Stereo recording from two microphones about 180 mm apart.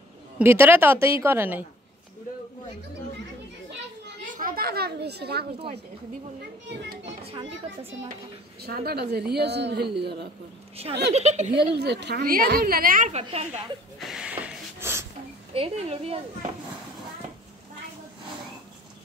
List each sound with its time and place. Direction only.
0.4 s a woman's voice: 10° right (ahead or behind)
4.3 s children playing: 50° right (ahead or behind)
8.6 s a woman's voice: 60° right (ahead or behind)
11.1 s speech: 40° right (ahead or behind)
11.7 s a woman's voice: 70° right (ahead or behind); by 13.2 s 45° right (ahead or behind)
13.2 s speech: 35° right (ahead or behind)
13.9 s a sound: centre (ahead or behind)
15.5 s speech: 30° right (ahead or behind)